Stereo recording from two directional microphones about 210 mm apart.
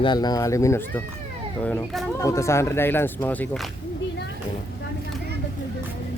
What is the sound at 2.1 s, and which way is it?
Speech, 15° left (ahead or behind).